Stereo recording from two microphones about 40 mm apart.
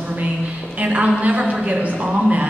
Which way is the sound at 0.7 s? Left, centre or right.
Right.